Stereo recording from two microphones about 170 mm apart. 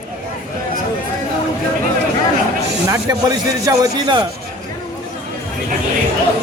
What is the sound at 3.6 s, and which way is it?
Speech, 20° right (ahead or behind).